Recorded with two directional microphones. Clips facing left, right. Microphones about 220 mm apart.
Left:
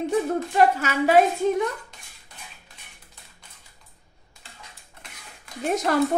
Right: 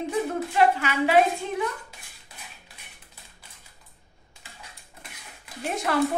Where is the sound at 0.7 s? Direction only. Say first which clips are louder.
Left 2 dB; 40° left (ahead or behind).